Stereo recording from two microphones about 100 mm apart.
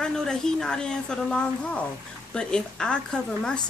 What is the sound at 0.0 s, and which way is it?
Speech, 5° left (ahead or behind).